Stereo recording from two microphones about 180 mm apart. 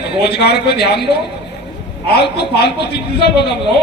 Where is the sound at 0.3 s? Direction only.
65° left (ahead or behind).